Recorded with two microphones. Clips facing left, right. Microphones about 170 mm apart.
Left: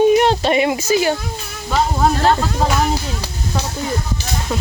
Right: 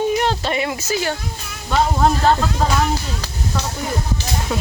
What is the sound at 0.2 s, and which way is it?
Speech, 20° left (ahead or behind).